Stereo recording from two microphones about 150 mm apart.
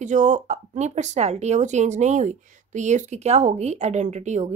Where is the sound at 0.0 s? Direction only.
55° right (ahead or behind).